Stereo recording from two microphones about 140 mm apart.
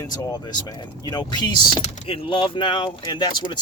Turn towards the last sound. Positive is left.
turn(degrees=30)  # may be behind; listen again after turning